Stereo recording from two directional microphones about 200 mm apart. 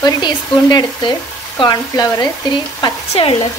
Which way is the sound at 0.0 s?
20° left (ahead or behind).